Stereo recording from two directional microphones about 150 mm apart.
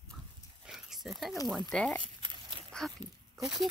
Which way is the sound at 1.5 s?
Centre (ahead or behind).